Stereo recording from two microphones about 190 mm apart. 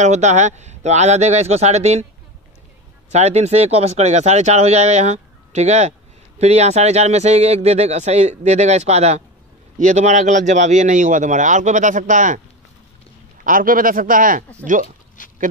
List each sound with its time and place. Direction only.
0.0 s speech: 40° right (ahead or behind)
3.1 s speech: 35° right (ahead or behind)
13.4 s speech: 45° right (ahead or behind)
15.2 s pig: 45° left (ahead or behind)